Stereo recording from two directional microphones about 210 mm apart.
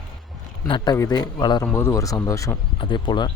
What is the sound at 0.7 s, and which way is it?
A man's voice, 20° left (ahead or behind).